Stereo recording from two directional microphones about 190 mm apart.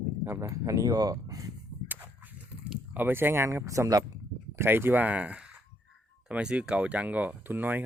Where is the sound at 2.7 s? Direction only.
10° right (ahead or behind).